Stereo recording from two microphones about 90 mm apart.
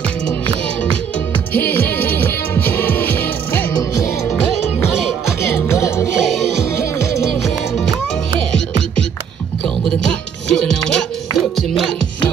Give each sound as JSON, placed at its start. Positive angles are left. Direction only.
{"t": 1.5, "sound": "music", "side_deg": 20}
{"t": 3.7, "sound": "music", "side_deg": 40}
{"t": 5.4, "sound": "music", "side_deg": 30}
{"t": 6.1, "sound": "music", "side_deg": -5}
{"t": 6.6, "sound": "music", "side_deg": 30}
{"t": 10.5, "sound": "music", "side_deg": 5}